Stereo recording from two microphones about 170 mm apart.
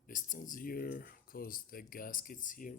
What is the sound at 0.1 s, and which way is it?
Speech, 50° left (ahead or behind).